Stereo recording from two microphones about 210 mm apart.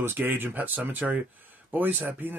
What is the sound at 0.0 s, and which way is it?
Speech, 10° right (ahead or behind).